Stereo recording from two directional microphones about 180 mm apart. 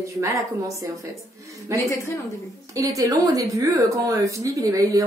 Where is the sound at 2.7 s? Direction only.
20° right (ahead or behind).